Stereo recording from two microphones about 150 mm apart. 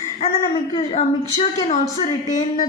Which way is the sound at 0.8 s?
45° left (ahead or behind).